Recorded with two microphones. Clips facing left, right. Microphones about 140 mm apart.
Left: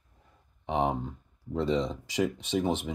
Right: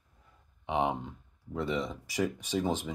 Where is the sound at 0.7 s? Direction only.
40° left (ahead or behind); by 2.8 s 20° left (ahead or behind).